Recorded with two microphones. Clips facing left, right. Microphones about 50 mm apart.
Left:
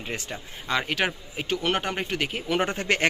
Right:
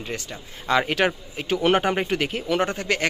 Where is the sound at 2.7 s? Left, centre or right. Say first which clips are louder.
Even; left.